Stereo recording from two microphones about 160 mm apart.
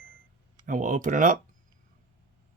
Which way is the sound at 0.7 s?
55° right (ahead or behind).